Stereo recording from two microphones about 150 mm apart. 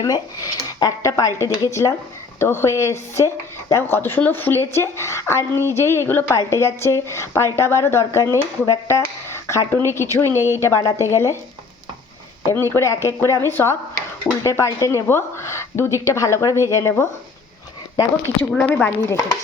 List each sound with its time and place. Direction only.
0.0 s a woman's voice: 25° left (ahead or behind)
12.5 s a woman's voice: 15° left (ahead or behind)
18.5 s speech: 15° left (ahead or behind)